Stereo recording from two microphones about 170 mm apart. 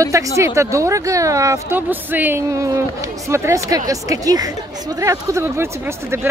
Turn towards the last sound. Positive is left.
turn(degrees=-15)  # may be behind; listen again after turning